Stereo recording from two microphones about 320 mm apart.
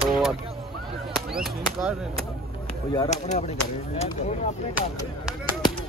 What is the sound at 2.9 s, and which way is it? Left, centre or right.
Speech, centre.